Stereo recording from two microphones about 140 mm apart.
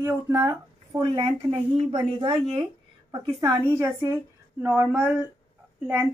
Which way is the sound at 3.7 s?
20° right (ahead or behind).